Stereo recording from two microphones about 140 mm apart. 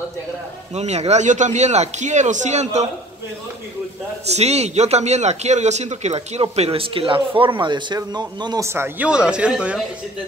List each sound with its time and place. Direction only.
0.7 s a man's voice: 50° right (ahead or behind)
4.3 s speech: 50° right (ahead or behind); by 8.6 s 30° right (ahead or behind)
8.6 s speech: 15° right (ahead or behind)